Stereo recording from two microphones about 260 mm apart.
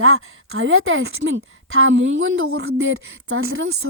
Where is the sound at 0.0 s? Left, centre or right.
Right.